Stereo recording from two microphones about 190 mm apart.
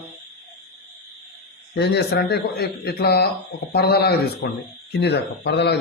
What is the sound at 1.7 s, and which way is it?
A man's voice, 60° left (ahead or behind).